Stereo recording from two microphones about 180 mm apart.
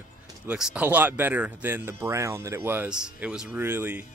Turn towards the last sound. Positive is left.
turn(degrees=-10)  # may be behind; listen again after turning